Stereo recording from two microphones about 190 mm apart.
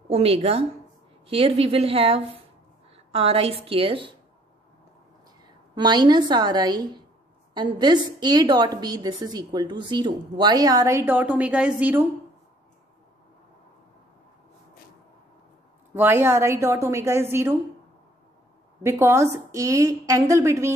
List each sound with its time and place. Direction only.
0.1 s a woman's voice: 30° right (ahead or behind)
5.8 s a woman's voice: 25° right (ahead or behind)
15.9 s a woman's voice: 10° right (ahead or behind)
18.8 s a woman's voice: 15° right (ahead or behind)